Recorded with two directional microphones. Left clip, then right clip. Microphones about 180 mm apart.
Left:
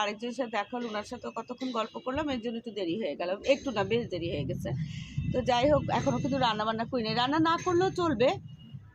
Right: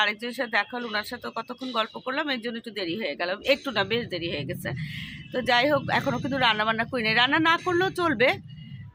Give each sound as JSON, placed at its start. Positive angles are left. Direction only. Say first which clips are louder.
{"t": 0.0, "sound": "speech", "louder": "right 6 dB", "side_deg": -10}